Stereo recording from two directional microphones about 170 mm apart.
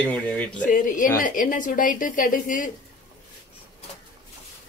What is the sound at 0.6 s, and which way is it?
A woman's voice, 50° left (ahead or behind).